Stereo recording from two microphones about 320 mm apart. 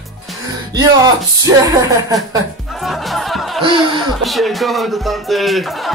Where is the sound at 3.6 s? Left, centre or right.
Centre.